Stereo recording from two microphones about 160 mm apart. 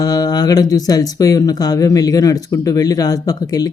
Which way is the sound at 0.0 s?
25° left (ahead or behind).